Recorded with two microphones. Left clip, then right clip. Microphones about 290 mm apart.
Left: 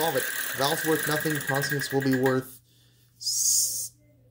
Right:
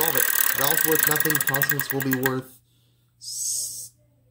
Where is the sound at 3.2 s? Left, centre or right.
Centre.